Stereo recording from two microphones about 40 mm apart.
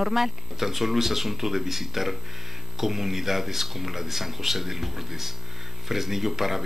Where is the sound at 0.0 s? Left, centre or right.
Centre.